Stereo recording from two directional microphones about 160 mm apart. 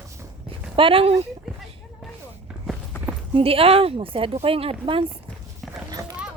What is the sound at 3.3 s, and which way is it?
Speech, 35° right (ahead or behind).